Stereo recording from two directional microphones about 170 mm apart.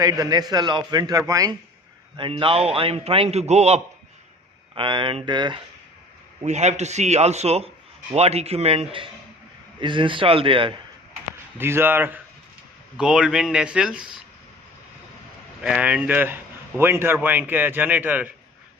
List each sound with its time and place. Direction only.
0.0 s a man's voice: 20° right (ahead or behind)
2.1 s a man's voice: 30° right (ahead or behind)
4.7 s a man's voice: 30° right (ahead or behind)
6.4 s a man's voice: 40° right (ahead or behind)
11.5 s speech: 15° right (ahead or behind)
15.6 s speech: 5° right (ahead or behind)